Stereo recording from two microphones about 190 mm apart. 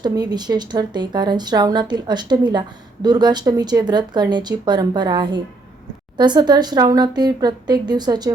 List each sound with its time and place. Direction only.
0.0 s speech: 20° right (ahead or behind)